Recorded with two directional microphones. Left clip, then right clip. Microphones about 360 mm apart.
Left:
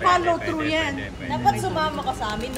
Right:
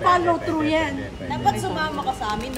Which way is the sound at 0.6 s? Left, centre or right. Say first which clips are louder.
Right 1 dB; right.